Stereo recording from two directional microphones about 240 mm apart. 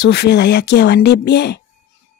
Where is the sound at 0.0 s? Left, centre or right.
Left.